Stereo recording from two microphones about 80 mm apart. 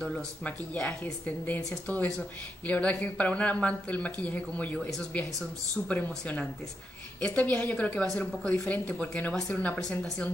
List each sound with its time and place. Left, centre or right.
0.4 s speech: centre
4.7 s speech: centre
5.9 s speech: centre
9.8 s speech: centre